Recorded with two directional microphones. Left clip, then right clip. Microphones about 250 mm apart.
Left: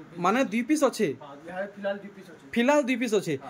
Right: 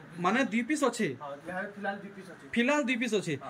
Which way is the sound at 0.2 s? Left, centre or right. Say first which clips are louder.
Left 4 dB; centre.